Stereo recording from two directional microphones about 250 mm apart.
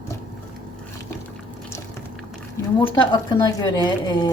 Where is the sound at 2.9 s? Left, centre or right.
Centre.